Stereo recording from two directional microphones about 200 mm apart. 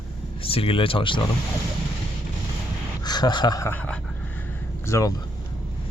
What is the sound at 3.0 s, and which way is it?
Speech, 20° left (ahead or behind).